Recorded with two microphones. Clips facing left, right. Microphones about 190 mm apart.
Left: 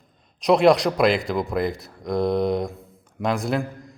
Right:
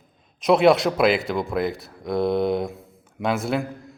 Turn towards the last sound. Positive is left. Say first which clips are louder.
# even
turn(degrees=0)  # may be behind; listen again after turning